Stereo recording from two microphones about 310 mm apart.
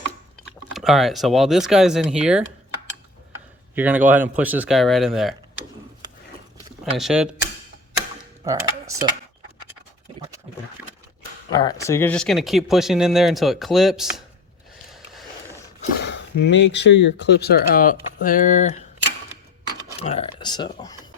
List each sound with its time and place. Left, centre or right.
0.7 s speech: centre
3.8 s speech: centre
6.9 s speech: centre
8.4 s speech: centre
11.5 s speech: centre
14.9 s a sound: centre
15.8 s speech: left
20.0 s speech: centre